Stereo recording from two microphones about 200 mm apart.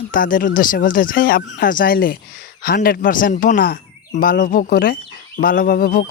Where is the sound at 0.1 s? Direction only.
45° left (ahead or behind).